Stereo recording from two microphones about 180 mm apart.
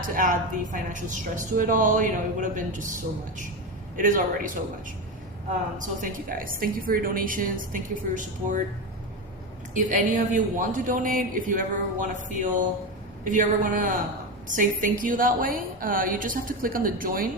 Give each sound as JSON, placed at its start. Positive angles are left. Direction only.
{"t": 0.1, "sound": "speech", "side_deg": -50}
{"t": 3.9, "sound": "speech", "side_deg": -50}
{"t": 5.7, "sound": "speech", "side_deg": -45}
{"t": 9.7, "sound": "speech", "side_deg": -45}